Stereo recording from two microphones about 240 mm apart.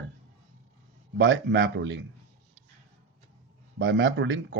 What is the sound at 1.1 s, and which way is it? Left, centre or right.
Speech, right.